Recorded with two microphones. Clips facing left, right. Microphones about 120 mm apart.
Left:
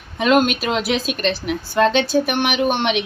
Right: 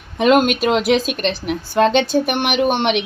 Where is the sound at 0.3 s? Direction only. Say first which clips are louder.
Right 2 dB; centre (ahead or behind).